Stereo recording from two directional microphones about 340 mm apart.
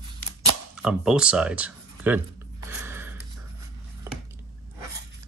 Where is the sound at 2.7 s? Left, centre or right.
Centre.